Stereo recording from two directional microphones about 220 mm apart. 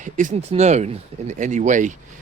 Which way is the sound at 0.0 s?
35° right (ahead or behind).